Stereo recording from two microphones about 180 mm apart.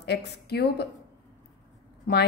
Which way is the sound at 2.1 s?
60° left (ahead or behind).